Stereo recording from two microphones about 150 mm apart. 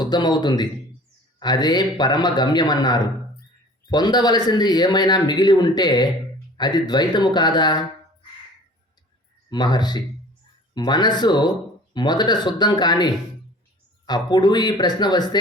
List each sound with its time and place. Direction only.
0.0 s speech: 30° left (ahead or behind)
9.5 s speech: 30° left (ahead or behind)
14.1 s speech: 30° left (ahead or behind)